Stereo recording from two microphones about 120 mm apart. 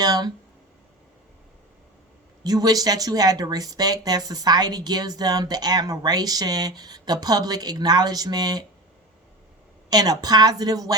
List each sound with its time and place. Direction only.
0.0 s a sound: 35° right (ahead or behind)
2.4 s speech: 35° right (ahead or behind)
9.9 s speech: 35° right (ahead or behind)